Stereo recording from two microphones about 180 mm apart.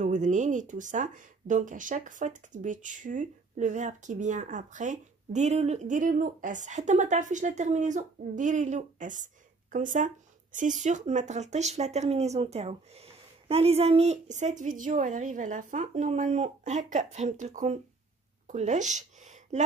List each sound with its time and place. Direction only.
0.0 s speech: 45° right (ahead or behind)